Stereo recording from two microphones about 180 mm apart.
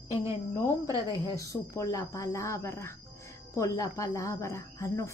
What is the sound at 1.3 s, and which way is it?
Speech, 20° left (ahead or behind).